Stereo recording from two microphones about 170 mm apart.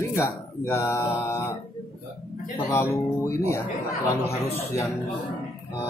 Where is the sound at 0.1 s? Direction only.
15° left (ahead or behind).